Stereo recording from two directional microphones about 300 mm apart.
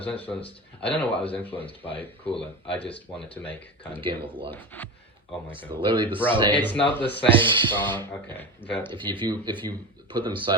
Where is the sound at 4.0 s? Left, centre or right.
Centre.